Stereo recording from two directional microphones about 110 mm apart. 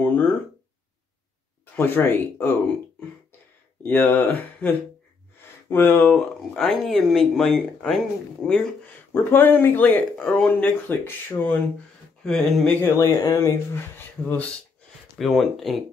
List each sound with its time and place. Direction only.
0.0 s a sound: 15° left (ahead or behind)
1.8 s speech: 20° left (ahead or behind)
3.8 s speech: 15° left (ahead or behind)
6.1 s speech: 5° left (ahead or behind)
9.1 s speech: 15° left (ahead or behind)
12.2 s speech: 5° left (ahead or behind)
12.8 s speech: 25° left (ahead or behind)
13.9 s speech: 15° left (ahead or behind)
15.1 s speech: centre (ahead or behind)